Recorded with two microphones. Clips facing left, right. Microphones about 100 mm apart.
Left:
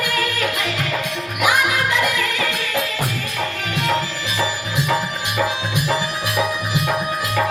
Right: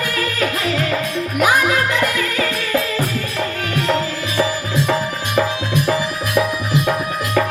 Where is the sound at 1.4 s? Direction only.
35° right (ahead or behind).